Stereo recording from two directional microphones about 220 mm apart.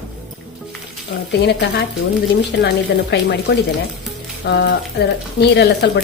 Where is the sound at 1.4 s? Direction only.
50° left (ahead or behind).